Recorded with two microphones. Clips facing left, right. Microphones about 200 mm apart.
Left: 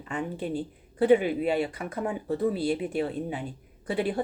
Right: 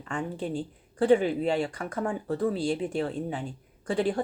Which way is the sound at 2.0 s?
25° left (ahead or behind).